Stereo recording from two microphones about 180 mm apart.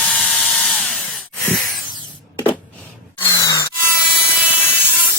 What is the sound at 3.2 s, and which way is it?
Grunt, 20° left (ahead or behind).